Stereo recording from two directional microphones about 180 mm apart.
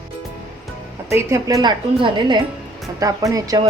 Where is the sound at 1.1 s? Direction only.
15° right (ahead or behind).